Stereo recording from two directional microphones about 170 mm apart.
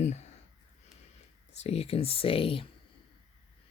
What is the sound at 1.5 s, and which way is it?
Speech, 35° left (ahead or behind).